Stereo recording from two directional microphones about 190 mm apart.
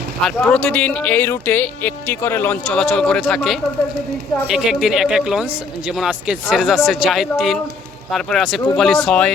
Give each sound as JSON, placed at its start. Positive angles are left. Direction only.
{"t": 0.3, "sound": "speech", "side_deg": 5}